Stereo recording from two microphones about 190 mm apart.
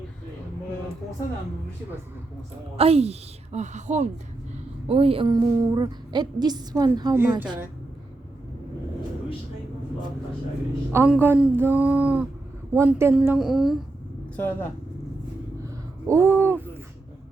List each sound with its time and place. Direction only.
2.7 s a woman's voice: 30° right (ahead or behind); by 7.4 s 15° right (ahead or behind)
10.9 s speech: 10° right (ahead or behind)
14.3 s speech: 10° left (ahead or behind)
15.6 s a sound: 15° right (ahead or behind)